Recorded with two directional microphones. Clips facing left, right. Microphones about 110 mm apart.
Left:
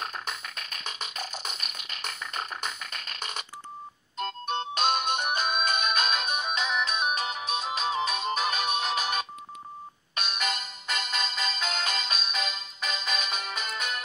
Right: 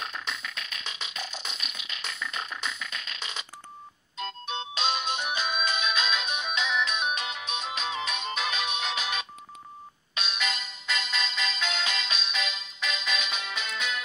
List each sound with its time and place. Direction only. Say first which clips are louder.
0.0 s music: left 1 dB; 45° left (ahead or behind)